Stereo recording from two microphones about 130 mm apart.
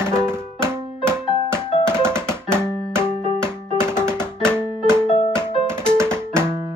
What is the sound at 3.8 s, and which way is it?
Music, 20° right (ahead or behind).